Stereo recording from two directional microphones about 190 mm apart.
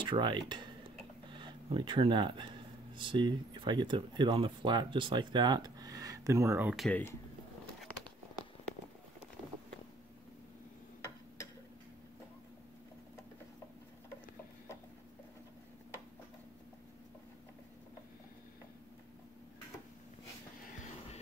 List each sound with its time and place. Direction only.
0.0 s speech: 25° right (ahead or behind); by 6.9 s 5° right (ahead or behind)
6.9 s speech: 10° left (ahead or behind)